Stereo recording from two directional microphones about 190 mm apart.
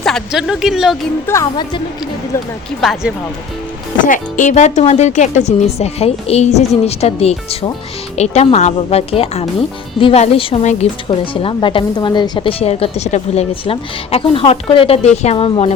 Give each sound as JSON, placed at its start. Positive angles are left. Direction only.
{"t": 0.0, "sound": "speech", "side_deg": 0}
{"t": 1.3, "sound": "a woman's voice", "side_deg": 20}
{"t": 2.8, "sound": "speech", "side_deg": 0}
{"t": 4.0, "sound": "a woman's voice", "side_deg": 45}